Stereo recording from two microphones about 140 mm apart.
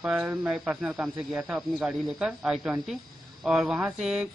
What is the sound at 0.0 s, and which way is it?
Speech, 10° right (ahead or behind).